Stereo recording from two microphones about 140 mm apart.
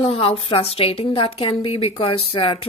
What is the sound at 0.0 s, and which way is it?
A woman's voice, 40° left (ahead or behind).